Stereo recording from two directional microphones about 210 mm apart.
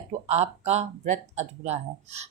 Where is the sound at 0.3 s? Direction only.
30° right (ahead or behind).